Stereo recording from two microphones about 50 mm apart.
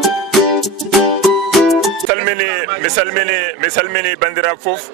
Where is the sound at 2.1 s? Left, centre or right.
Right.